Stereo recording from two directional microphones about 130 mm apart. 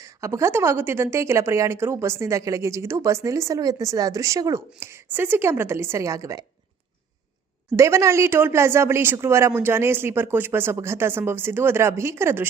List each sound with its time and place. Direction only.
0.0 s a woman's voice: 25° right (ahead or behind)
7.7 s a woman's voice: 20° right (ahead or behind)